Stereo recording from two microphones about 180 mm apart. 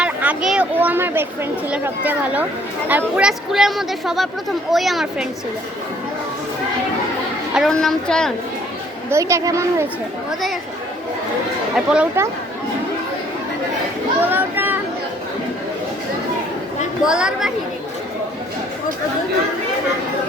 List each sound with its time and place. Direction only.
0.0 s a sound: 5° right (ahead or behind)
1.7 s a woman's voice: 10° right (ahead or behind)
7.5 s a woman's voice: centre (ahead or behind)
9.0 s speech: 15° right (ahead or behind)
11.9 s speech: 10° right (ahead or behind)
14.2 s a sound: 10° right (ahead or behind)
17.0 s a woman's voice: 5° right (ahead or behind)